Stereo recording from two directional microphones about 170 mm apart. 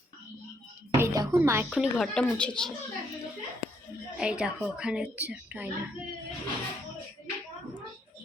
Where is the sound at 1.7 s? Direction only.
Centre (ahead or behind).